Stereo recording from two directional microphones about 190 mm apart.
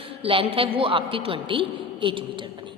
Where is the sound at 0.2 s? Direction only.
30° right (ahead or behind).